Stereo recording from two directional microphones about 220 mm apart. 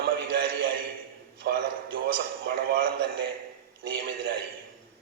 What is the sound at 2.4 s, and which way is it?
Speech, 45° right (ahead or behind).